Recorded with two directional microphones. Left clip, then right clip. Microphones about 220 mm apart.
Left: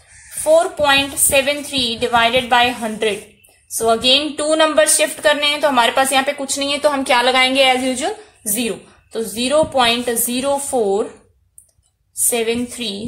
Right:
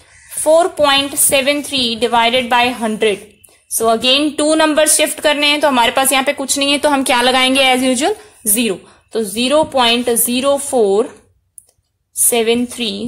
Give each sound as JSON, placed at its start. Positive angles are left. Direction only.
{"t": 0.4, "sound": "a woman's voice", "side_deg": -45}
{"t": 12.3, "sound": "a woman's voice", "side_deg": -40}